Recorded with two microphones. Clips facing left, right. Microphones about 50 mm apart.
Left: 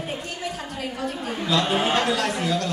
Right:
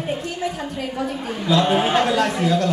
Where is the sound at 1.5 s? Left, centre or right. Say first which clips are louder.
Right 4 dB; centre.